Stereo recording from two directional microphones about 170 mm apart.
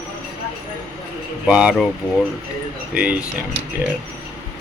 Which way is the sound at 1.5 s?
5° right (ahead or behind).